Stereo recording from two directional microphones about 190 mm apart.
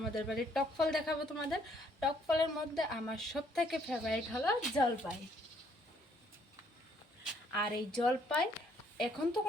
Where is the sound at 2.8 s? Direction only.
Centre (ahead or behind).